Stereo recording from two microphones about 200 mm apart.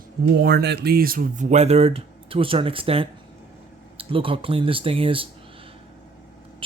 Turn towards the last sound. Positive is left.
turn(degrees=-25)  # may be behind; listen again after turning